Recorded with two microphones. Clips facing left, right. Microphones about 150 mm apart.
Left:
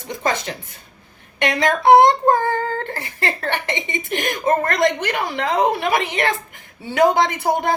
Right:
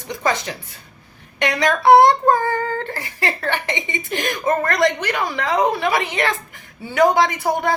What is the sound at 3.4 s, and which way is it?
A woman's voice, 20° left (ahead or behind).